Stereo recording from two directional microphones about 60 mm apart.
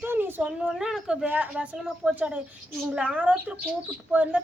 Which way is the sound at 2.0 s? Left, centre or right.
Right.